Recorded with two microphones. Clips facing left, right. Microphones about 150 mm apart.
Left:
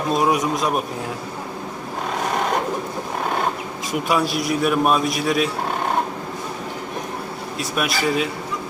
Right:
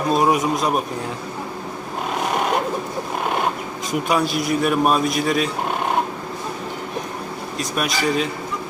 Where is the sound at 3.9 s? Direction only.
Centre (ahead or behind).